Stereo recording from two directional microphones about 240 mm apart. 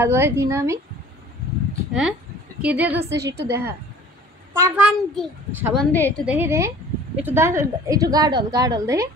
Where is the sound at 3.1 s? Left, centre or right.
Right.